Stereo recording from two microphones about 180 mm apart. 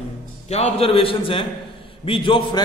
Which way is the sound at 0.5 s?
35° left (ahead or behind).